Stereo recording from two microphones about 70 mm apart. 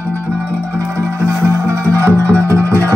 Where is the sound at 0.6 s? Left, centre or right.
Right.